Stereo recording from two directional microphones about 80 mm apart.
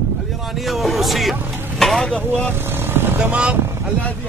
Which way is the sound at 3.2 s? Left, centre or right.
Centre.